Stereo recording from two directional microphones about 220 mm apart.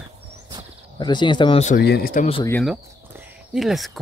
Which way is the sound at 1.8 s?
45° left (ahead or behind).